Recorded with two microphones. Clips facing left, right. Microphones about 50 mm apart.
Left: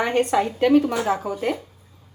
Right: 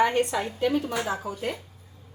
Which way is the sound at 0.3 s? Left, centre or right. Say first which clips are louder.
Left 8 dB; left.